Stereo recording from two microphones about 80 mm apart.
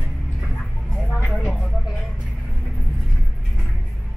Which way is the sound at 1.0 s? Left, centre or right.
Centre.